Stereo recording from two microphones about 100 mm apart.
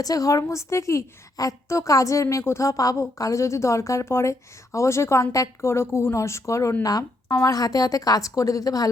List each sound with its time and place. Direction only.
0.0 s a woman's voice: 35° left (ahead or behind)